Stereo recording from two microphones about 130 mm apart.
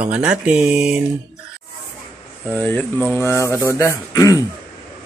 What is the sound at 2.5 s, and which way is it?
Speech, 15° left (ahead or behind).